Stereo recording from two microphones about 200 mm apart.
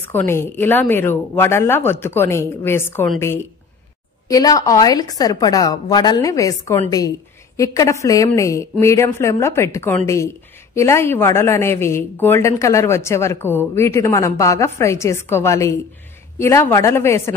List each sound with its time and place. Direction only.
0.1 s speech: 10° left (ahead or behind)
4.3 s speech: 20° left (ahead or behind)